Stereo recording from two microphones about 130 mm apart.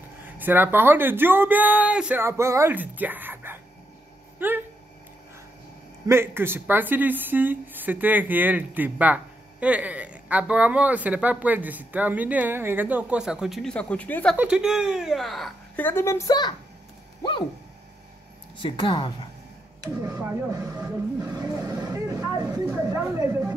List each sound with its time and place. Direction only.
0.4 s a woman's voice: 15° right (ahead or behind)
6.0 s a woman's voice: 20° right (ahead or behind); by 14.3 s 10° left (ahead or behind)
14.3 s a woman's voice: 10° right (ahead or behind)
15.8 s a woman's voice: 20° left (ahead or behind)
17.2 s a sound: 35° left (ahead or behind)
18.6 s a woman's voice: 35° left (ahead or behind)
20.1 s a woman's voice: 20° right (ahead or behind)
21.4 s speech: 25° right (ahead or behind)
21.7 s vehicle: 30° right (ahead or behind)
22.8 s speech: 25° right (ahead or behind)